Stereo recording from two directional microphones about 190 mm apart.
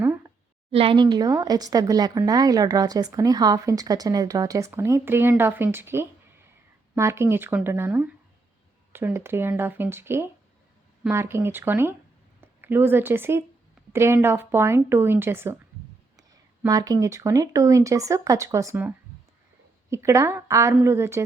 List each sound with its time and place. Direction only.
0.0 s a sound: 10° right (ahead or behind)
0.7 s speech: 30° right (ahead or behind); by 15.6 s 10° right (ahead or behind)
16.6 s speech: 20° right (ahead or behind)